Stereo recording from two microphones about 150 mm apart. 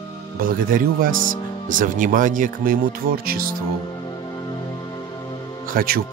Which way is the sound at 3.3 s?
75° right (ahead or behind).